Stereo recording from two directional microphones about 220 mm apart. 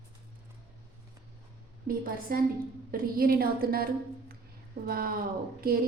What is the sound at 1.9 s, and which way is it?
A woman's voice, 40° right (ahead or behind).